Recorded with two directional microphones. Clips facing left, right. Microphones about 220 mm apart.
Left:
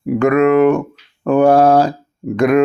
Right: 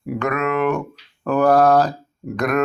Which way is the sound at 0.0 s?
50° left (ahead or behind).